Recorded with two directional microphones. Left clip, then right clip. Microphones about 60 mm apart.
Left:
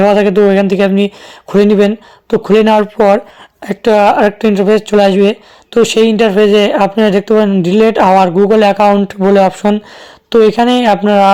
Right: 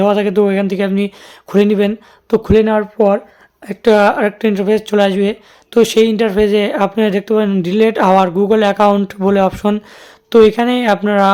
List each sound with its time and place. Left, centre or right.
0.1 s speech: left
2.6 s speech: left
3.8 s speech: left; by 10.5 s centre
10.5 s speech: left